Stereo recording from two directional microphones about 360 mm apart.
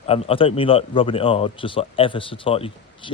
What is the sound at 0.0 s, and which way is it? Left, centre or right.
A man's voice, centre.